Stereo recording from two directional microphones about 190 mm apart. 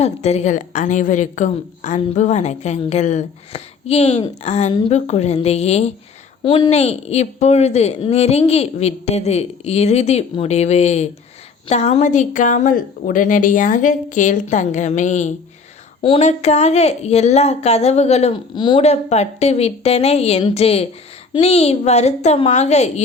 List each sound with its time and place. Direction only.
0.0 s a woman's voice: 35° left (ahead or behind)